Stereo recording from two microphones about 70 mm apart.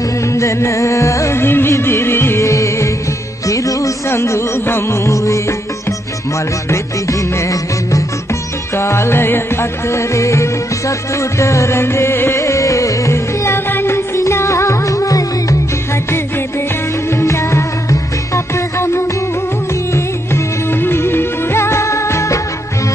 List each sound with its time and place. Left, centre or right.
0.2 s music: left
4.1 s music: left
6.7 s music: left
8.7 s music: left
17.1 s music: left